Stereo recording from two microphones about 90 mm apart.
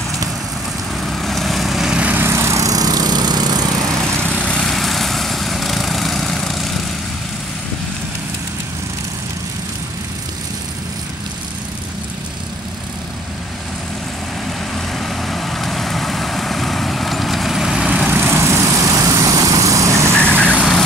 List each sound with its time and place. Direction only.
1.0 s vehicle: 5° left (ahead or behind)
2.1 s lawn mower: 30° right (ahead or behind); by 3.6 s 50° right (ahead or behind)
4.4 s lawn mower: 5° left (ahead or behind)
15.0 s vehicle: centre (ahead or behind)
17.8 s vehicle: 20° right (ahead or behind); by 20.2 s 35° right (ahead or behind)
20.2 s vehicle: 20° right (ahead or behind)